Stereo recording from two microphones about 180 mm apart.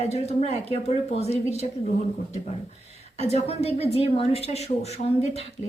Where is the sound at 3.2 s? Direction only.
35° left (ahead or behind).